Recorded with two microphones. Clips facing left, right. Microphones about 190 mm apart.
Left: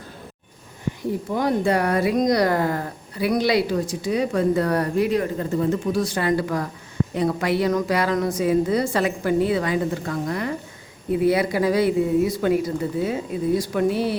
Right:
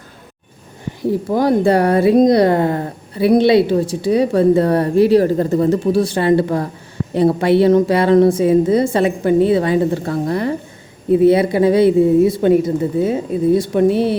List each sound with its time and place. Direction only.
1.3 s a woman's voice: 35° right (ahead or behind)